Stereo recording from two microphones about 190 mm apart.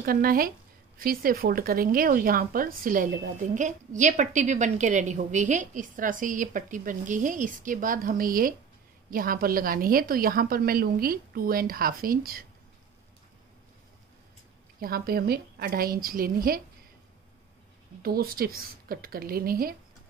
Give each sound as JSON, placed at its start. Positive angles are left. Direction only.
{"t": 0.0, "sound": "a woman's voice", "side_deg": -50}
{"t": 14.8, "sound": "a woman's voice", "side_deg": -55}
{"t": 18.0, "sound": "a woman's voice", "side_deg": -50}